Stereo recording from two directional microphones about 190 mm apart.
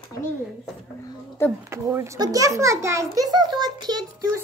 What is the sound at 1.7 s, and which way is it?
A child's voice, 15° right (ahead or behind).